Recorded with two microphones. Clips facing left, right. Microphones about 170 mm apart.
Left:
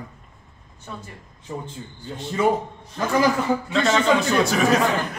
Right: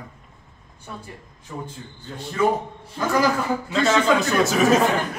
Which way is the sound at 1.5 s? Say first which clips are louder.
Left 1 dB; 25° left (ahead or behind).